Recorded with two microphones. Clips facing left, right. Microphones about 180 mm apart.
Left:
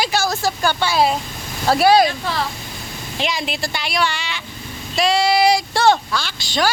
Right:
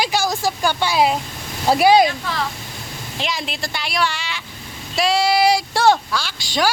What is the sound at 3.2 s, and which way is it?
Speech, centre (ahead or behind).